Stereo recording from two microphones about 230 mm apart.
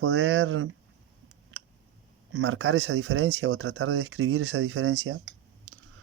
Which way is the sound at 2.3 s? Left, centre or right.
Right.